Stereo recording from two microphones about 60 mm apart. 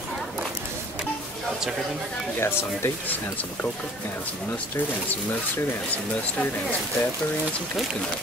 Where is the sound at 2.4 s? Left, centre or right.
Left.